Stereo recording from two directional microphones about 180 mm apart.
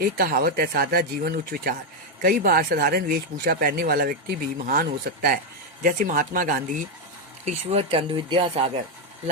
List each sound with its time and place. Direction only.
0.0 s speech: 55° right (ahead or behind)
7.4 s speech: 35° right (ahead or behind)